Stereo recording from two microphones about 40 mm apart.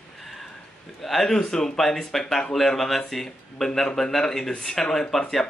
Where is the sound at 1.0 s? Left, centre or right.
Centre.